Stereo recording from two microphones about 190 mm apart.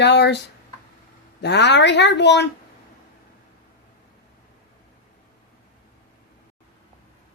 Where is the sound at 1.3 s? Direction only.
65° left (ahead or behind).